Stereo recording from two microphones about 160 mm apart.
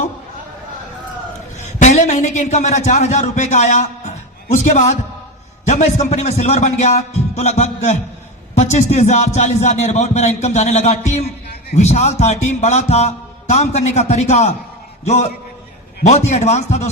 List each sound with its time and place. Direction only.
1.5 s a man's voice: 45° left (ahead or behind)